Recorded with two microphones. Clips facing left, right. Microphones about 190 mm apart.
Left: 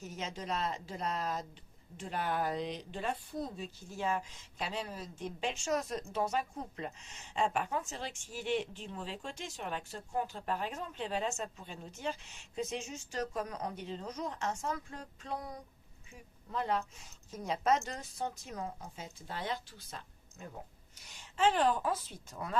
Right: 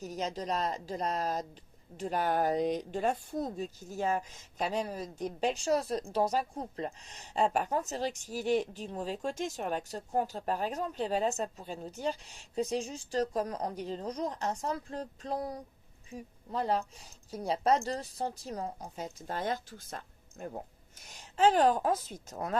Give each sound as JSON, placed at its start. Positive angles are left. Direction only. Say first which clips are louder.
{"t": 0.0, "sound": "a woman's voice", "louder": "right 6 dB", "side_deg": -35}